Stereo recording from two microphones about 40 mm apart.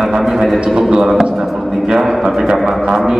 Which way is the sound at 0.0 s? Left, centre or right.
Centre.